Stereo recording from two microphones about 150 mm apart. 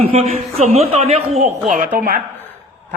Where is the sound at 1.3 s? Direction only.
55° right (ahead or behind).